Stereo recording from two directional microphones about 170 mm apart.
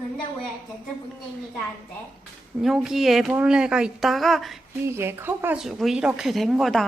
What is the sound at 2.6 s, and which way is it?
Speech, centre (ahead or behind).